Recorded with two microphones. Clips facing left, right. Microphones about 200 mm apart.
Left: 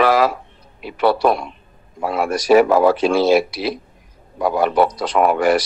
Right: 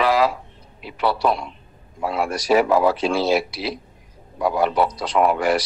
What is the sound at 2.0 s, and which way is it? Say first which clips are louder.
Speech: left 4 dB; 50° left (ahead or behind).